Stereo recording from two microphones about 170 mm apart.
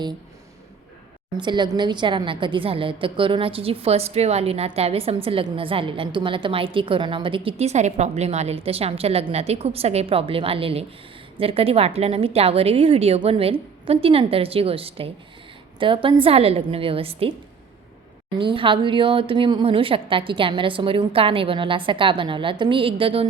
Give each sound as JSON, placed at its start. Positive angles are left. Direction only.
{"t": 1.4, "sound": "a woman's voice", "side_deg": -25}
{"t": 18.3, "sound": "a woman's voice", "side_deg": -30}